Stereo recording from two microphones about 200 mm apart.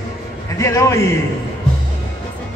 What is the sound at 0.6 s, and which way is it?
Speech, 15° left (ahead or behind).